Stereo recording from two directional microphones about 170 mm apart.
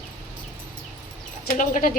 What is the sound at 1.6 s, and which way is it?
Speech, 55° left (ahead or behind).